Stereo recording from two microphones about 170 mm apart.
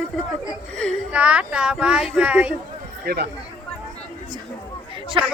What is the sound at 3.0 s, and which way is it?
Speech, 65° right (ahead or behind).